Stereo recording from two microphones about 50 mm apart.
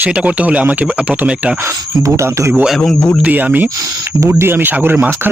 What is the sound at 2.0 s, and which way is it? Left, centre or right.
Speech, right.